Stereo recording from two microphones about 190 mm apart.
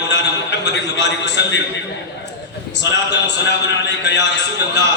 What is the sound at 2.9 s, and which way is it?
A man's voice, 65° left (ahead or behind).